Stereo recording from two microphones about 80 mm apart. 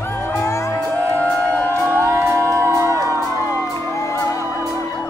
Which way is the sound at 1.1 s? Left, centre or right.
Left.